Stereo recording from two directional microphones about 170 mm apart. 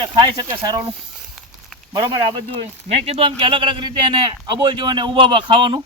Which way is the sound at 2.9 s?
35° right (ahead or behind).